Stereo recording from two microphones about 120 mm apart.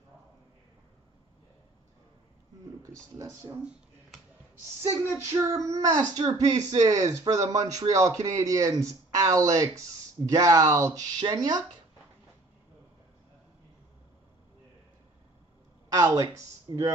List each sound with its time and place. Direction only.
2.8 s speech: 25° right (ahead or behind)
5.2 s speech: 25° right (ahead or behind)
16.0 s speech: 25° right (ahead or behind)
16.7 s speech: 40° right (ahead or behind)